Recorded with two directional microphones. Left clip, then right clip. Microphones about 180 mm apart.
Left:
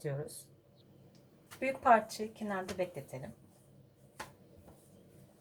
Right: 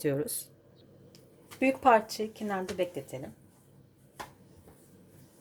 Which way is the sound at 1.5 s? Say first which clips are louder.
Right 4 dB; 45° right (ahead or behind).